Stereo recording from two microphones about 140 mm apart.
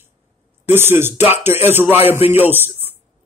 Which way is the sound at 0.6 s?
15° right (ahead or behind).